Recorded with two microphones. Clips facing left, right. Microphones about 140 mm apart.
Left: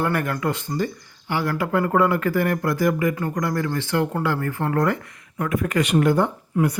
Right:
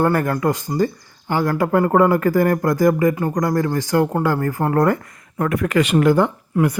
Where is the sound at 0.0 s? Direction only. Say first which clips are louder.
Right 5 dB; 45° right (ahead or behind).